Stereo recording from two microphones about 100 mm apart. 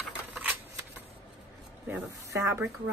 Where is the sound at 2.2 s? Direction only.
30° right (ahead or behind).